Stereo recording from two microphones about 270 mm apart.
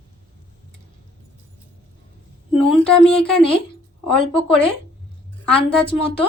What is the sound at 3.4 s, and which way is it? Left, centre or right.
Speech, centre.